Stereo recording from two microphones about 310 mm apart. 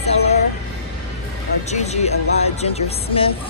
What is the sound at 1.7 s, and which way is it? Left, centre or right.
Music, left.